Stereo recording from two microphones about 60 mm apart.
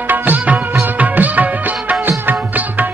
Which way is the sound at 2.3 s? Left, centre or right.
Right.